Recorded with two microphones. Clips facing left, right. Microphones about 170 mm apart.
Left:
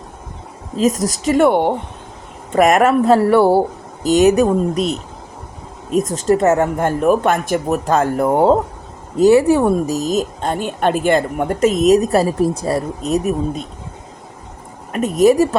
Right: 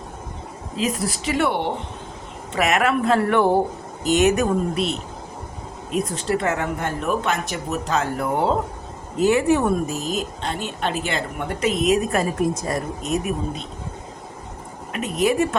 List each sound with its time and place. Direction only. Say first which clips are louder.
0.8 s a woman's voice: left 8 dB; 40° left (ahead or behind)
14.9 s a woman's voice: left 8 dB; 45° left (ahead or behind)